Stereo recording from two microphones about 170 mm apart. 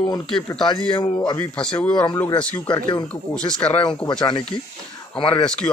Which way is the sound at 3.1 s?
5° left (ahead or behind).